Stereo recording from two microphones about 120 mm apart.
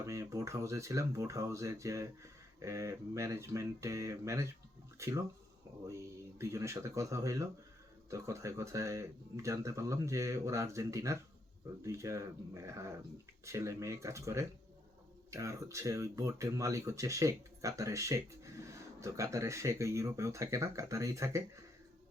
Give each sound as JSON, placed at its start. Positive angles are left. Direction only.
{"t": 0.0, "sound": "speech", "side_deg": -25}
{"t": 6.4, "sound": "speech", "side_deg": -25}